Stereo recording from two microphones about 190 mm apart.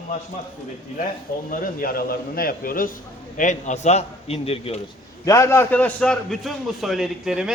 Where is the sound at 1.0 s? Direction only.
45° left (ahead or behind); by 4.8 s 30° left (ahead or behind).